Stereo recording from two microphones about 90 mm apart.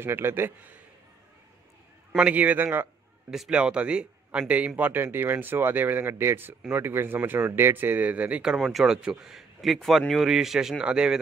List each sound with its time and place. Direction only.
0.0 s speech: 25° right (ahead or behind)
2.1 s a man's voice: 15° right (ahead or behind)
3.3 s a man's voice: 5° right (ahead or behind)